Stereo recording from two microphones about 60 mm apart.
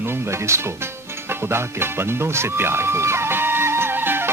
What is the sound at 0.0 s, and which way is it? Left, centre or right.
Speech, right.